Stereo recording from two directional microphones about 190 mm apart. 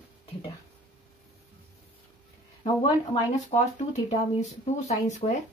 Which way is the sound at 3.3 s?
40° left (ahead or behind).